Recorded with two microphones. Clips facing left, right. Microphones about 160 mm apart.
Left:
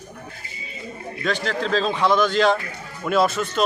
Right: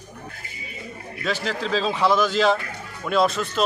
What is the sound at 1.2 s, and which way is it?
A man's voice, 5° right (ahead or behind).